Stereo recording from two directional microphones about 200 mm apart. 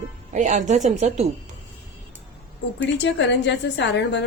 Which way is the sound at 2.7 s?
60° left (ahead or behind).